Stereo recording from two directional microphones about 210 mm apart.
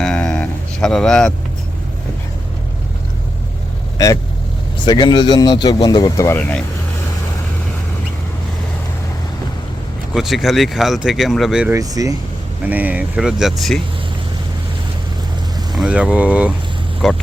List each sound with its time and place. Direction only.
0.0 s a sound: 5° left (ahead or behind)
3.9 s speech: 15° left (ahead or behind)
10.2 s speech: centre (ahead or behind)
11.7 s speech: 15° right (ahead or behind)
15.7 s speech: 5° right (ahead or behind)